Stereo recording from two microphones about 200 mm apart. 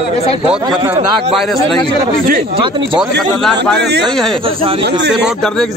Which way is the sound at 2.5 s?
25° right (ahead or behind).